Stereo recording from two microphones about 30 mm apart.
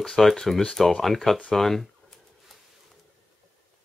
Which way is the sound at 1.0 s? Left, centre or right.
Centre.